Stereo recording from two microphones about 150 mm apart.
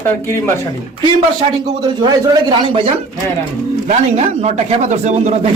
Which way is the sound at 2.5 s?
35° right (ahead or behind).